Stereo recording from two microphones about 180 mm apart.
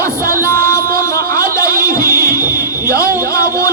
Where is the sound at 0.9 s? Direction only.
15° left (ahead or behind).